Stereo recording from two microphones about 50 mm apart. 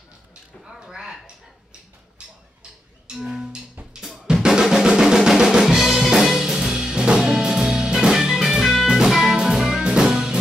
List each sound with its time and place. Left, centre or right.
0.7 s a sound: centre
3.1 s music: centre
4.0 s drum kit: centre
4.5 s drum: centre
8.1 s music: centre